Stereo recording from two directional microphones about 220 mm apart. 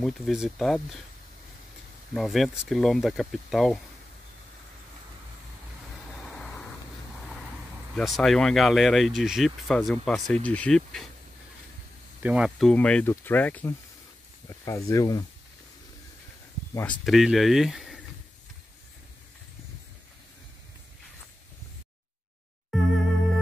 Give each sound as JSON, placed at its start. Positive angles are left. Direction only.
{"t": 0.0, "sound": "speech", "side_deg": 0}
{"t": 2.1, "sound": "speech", "side_deg": 0}
{"t": 6.2, "sound": "vehicle", "side_deg": 5}
{"t": 7.9, "sound": "speech", "side_deg": 0}
{"t": 12.2, "sound": "speech", "side_deg": -5}
{"t": 17.0, "sound": "speech", "side_deg": 0}
{"t": 22.7, "sound": "music", "side_deg": 0}